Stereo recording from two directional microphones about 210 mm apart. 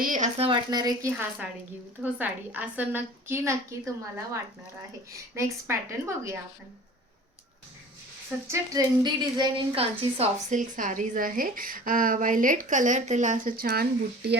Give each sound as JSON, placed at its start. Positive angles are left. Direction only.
{"t": 0.0, "sound": "a woman's voice", "side_deg": -35}
{"t": 1.1, "sound": "a woman's voice", "side_deg": -5}
{"t": 8.4, "sound": "a woman's voice", "side_deg": -15}